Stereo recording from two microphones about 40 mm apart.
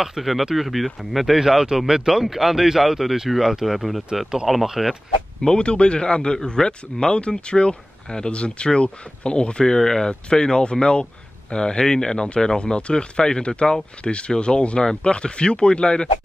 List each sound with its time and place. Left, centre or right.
0.0 s speech: centre
1.4 s speech: centre
5.6 s speech: left